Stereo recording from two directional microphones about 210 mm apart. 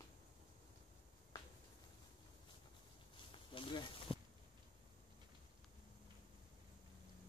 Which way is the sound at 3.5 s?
25° left (ahead or behind).